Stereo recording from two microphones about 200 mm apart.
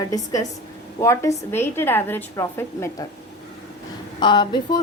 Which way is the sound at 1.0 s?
15° left (ahead or behind).